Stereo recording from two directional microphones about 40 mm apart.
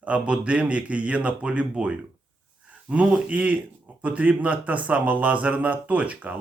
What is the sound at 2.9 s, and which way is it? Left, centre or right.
A man's voice, right.